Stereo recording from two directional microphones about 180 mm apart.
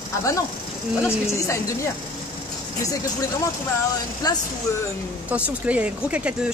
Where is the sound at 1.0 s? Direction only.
15° left (ahead or behind).